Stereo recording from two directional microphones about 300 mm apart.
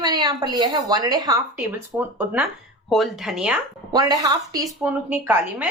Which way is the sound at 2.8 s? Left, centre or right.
Centre.